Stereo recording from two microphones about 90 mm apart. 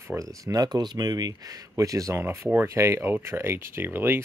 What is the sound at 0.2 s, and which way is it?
Speech, 40° right (ahead or behind).